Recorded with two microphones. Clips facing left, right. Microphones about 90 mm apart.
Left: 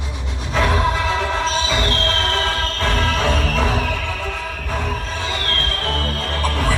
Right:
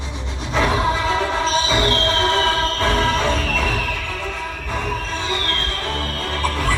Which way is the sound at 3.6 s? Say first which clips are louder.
Left 3 dB; 15° left (ahead or behind).